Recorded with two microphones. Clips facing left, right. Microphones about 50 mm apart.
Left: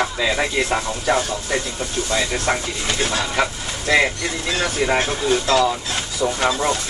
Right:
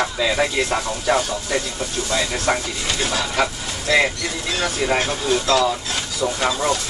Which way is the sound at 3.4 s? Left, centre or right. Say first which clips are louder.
Even; centre.